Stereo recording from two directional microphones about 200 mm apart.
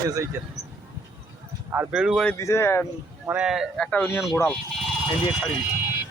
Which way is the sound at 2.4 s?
15° left (ahead or behind).